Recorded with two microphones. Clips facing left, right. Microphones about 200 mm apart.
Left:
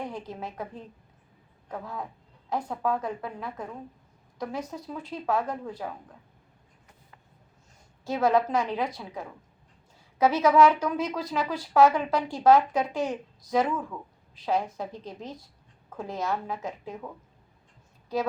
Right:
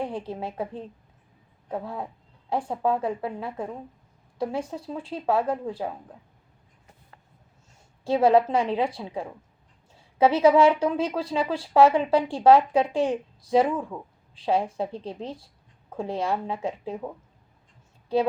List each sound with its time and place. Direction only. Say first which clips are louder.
0.0 s speech: right 5 dB; 30° right (ahead or behind)
8.0 s speech: right 5 dB; 30° right (ahead or behind)
18.1 s speech: right 6 dB; 30° right (ahead or behind)